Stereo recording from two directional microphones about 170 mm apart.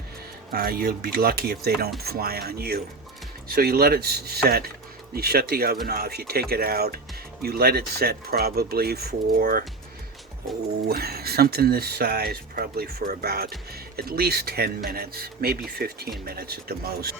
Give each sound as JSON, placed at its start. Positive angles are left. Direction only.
{"t": 0.5, "sound": "speech", "side_deg": -60}
{"t": 10.8, "sound": "speech", "side_deg": -65}